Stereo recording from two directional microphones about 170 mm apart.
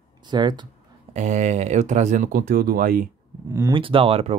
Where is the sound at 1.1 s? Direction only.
45° right (ahead or behind).